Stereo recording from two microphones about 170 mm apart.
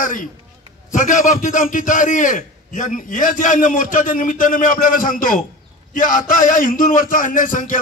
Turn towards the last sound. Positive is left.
turn(degrees=50)  # may be behind; listen again after turning